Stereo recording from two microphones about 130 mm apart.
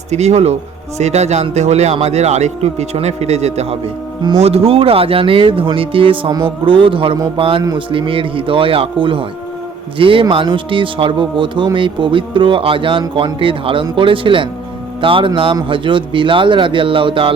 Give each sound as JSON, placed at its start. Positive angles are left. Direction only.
{"t": 0.1, "sound": "a man's voice", "side_deg": -60}